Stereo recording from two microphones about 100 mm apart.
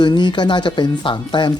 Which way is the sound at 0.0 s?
50° left (ahead or behind).